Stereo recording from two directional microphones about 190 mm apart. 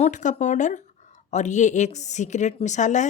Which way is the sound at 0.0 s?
40° left (ahead or behind).